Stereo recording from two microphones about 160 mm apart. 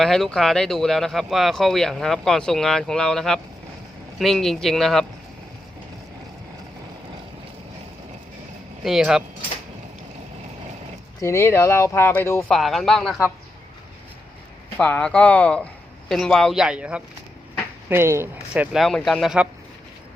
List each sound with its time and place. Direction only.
0.0 s speech: centre (ahead or behind)
8.8 s speech: 5° right (ahead or behind)
11.2 s speech: 20° left (ahead or behind)
12.5 s speech: centre (ahead or behind)
14.8 s speech: 5° left (ahead or behind)